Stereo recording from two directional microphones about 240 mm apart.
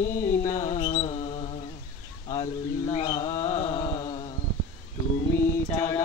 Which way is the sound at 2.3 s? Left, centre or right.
Centre.